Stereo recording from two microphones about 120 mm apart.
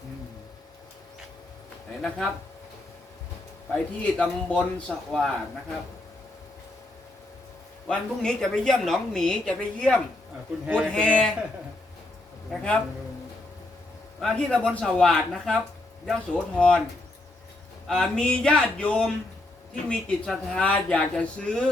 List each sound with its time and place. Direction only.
2.0 s a woman's voice: centre (ahead or behind)
4.0 s speech: 10° left (ahead or behind)
7.9 s a woman's voice: 5° left (ahead or behind)
12.5 s speech: 10° left (ahead or behind)
14.2 s a woman's voice: 5° left (ahead or behind)
17.8 s speech: 5° left (ahead or behind)